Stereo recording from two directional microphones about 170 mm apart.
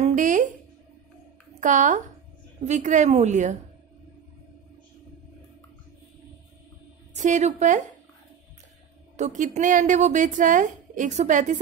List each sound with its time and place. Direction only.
0.0 s a sound: 50° right (ahead or behind)
1.6 s speech: 45° right (ahead or behind)
7.2 s speech: 45° right (ahead or behind)
9.1 s speech: 45° right (ahead or behind)